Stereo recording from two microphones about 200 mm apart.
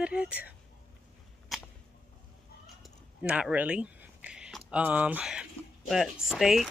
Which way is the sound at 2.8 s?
5° right (ahead or behind).